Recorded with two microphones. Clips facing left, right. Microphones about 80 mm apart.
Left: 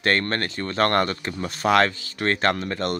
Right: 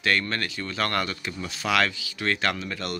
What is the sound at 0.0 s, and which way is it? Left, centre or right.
Speech, left.